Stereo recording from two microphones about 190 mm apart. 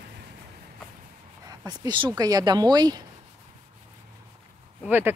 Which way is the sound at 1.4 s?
20° right (ahead or behind).